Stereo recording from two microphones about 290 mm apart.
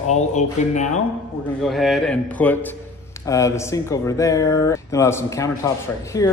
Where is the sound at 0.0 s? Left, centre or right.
Left.